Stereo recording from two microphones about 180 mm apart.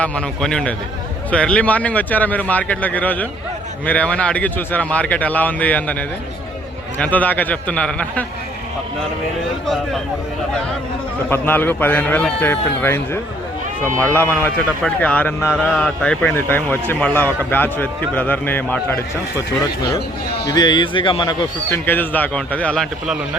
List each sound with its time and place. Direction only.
0.0 s a man's voice: 5° left (ahead or behind)
7.0 s a man's voice: 10° left (ahead or behind)
11.3 s a man's voice: 10° left (ahead or behind)
20.5 s speech: 25° left (ahead or behind)
21.8 s a man's voice: 10° left (ahead or behind)